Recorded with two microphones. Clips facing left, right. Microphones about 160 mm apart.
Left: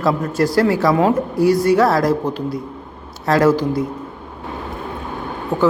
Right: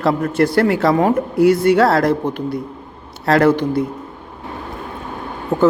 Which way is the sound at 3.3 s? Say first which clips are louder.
Right 1 dB; 60° right (ahead or behind).